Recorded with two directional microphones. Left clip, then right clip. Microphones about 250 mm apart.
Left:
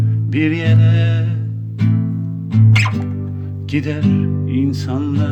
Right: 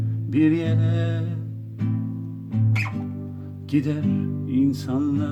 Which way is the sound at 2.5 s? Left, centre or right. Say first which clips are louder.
Left 10 dB; left.